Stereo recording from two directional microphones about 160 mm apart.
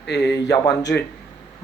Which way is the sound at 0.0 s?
90° left.